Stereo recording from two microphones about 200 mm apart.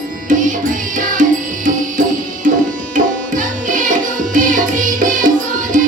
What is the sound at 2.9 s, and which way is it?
Tabla, 40° right (ahead or behind).